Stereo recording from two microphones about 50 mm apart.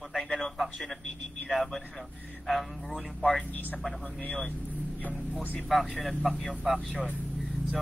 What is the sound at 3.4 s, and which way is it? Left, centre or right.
Speech, left.